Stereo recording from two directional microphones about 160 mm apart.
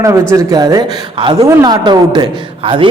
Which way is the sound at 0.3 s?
25° right (ahead or behind).